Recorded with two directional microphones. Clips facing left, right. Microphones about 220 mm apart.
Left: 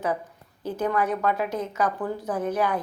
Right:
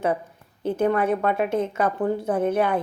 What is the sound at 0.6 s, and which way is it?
A woman's voice, 25° right (ahead or behind).